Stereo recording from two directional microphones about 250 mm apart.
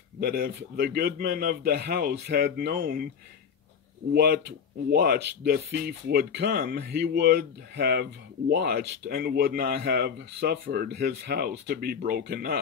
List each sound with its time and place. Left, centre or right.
0.2 s speech: right
4.1 s speech: right